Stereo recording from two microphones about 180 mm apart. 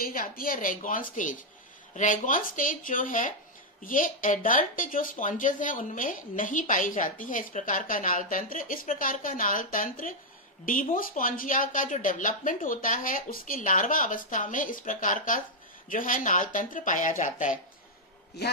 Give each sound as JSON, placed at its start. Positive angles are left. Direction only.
{"t": 0.0, "sound": "a woman's voice", "side_deg": 55}